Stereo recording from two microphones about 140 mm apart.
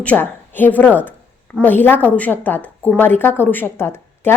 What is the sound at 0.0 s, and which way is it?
A woman's voice, 10° left (ahead or behind).